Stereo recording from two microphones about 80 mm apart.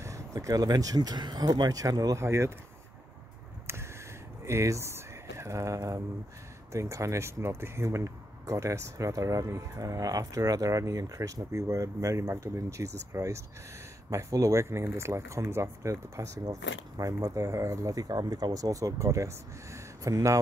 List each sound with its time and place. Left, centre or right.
0.0 s speech: right
1.7 s speech: right
2.1 s speech: right
3.6 s a sound: right
4.5 s speech: right